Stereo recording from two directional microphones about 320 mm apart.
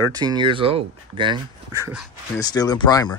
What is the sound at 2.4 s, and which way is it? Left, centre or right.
Speech, centre.